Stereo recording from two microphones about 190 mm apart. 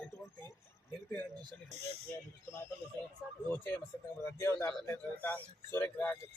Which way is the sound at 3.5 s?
10° left (ahead or behind).